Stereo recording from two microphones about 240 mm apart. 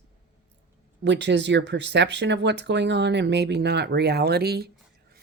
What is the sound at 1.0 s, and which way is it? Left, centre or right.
Speech, right.